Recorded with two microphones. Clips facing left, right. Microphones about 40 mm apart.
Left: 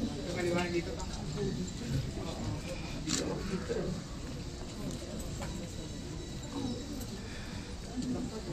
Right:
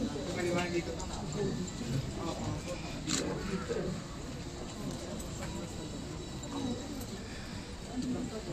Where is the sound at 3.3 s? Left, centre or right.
Centre.